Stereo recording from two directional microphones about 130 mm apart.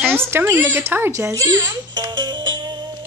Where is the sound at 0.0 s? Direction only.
15° right (ahead or behind).